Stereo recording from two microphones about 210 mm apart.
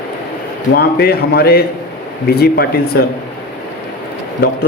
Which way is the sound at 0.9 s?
50° left (ahead or behind).